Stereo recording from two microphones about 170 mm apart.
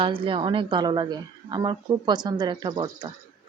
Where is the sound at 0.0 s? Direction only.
30° right (ahead or behind).